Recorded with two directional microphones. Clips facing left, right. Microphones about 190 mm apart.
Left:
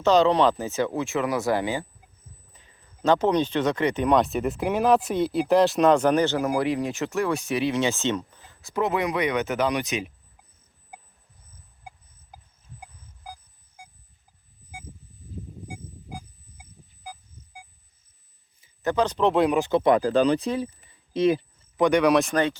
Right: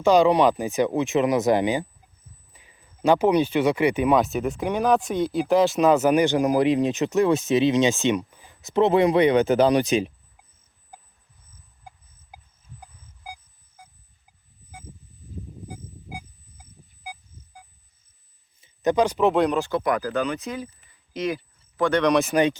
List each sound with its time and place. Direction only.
0.0 s speech: 10° right (ahead or behind)
8.7 s speech: 30° right (ahead or behind)
18.6 s speech: 20° right (ahead or behind); by 19.5 s centre (ahead or behind)
19.5 s speech: 20° left (ahead or behind)
22.1 s speech: centre (ahead or behind)